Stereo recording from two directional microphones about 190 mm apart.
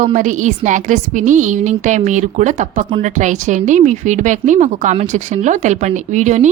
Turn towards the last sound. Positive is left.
turn(degrees=-40)  # may be behind; listen again after turning